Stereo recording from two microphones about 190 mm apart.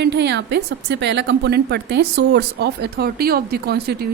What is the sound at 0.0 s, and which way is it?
A woman's voice, 65° right (ahead or behind).